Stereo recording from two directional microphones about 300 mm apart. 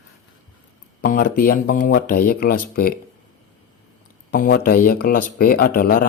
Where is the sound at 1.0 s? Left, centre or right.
Left.